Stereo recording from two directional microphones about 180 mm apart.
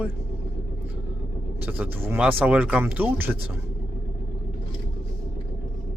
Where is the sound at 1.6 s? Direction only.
10° right (ahead or behind).